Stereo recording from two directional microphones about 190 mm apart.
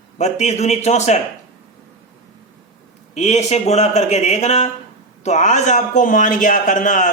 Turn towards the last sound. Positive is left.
turn(degrees=40)  # may be behind; listen again after turning